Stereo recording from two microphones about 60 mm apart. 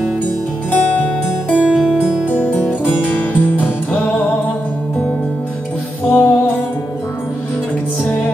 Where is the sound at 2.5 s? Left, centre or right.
Left.